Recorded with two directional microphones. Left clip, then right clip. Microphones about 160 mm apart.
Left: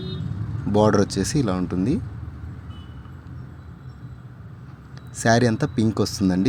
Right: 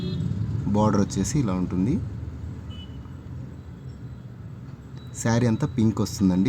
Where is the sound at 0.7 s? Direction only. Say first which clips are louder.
Left 5 dB; 15° left (ahead or behind).